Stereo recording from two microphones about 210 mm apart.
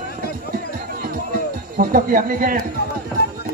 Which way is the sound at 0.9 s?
45° right (ahead or behind).